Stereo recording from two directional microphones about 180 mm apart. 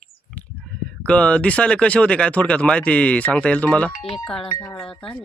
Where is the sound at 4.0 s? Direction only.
30° left (ahead or behind).